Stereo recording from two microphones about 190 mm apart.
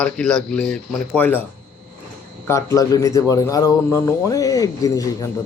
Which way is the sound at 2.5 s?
15° left (ahead or behind).